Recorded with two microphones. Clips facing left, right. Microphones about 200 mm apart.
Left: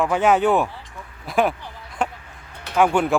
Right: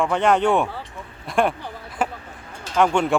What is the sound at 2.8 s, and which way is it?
Speech, 5° left (ahead or behind).